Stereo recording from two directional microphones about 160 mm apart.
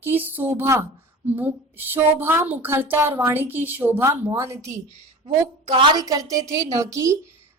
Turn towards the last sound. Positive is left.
turn(degrees=-20)  # may be behind; listen again after turning